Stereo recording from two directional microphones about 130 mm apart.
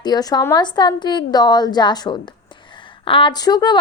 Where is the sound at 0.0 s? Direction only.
30° left (ahead or behind).